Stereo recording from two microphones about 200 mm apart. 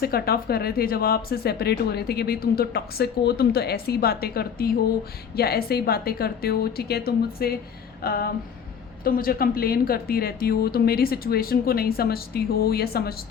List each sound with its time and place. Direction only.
0.0 s speech: 50° left (ahead or behind)